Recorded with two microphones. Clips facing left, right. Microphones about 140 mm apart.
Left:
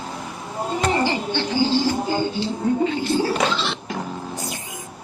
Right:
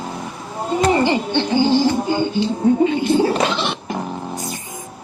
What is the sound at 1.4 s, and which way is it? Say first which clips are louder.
Music: right 5 dB; 20° right (ahead or behind).